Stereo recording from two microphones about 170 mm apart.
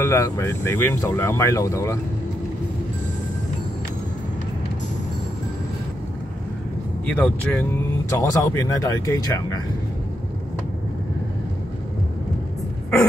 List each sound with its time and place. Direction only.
0.0 s speech: 15° left (ahead or behind)
7.1 s speech: 5° left (ahead or behind)
8.1 s speech: 20° left (ahead or behind)